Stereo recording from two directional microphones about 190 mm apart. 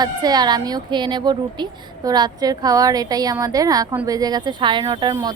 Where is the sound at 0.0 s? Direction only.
20° right (ahead or behind).